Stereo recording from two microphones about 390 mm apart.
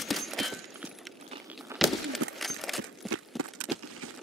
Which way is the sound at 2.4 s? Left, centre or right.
Centre.